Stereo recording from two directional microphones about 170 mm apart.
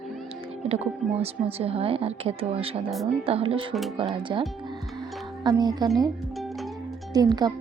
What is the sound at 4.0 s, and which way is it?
Speech, 30° right (ahead or behind).